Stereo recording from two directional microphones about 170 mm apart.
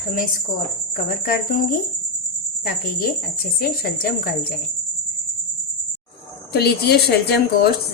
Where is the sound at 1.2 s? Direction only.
55° left (ahead or behind).